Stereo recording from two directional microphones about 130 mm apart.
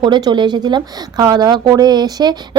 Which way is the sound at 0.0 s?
35° right (ahead or behind).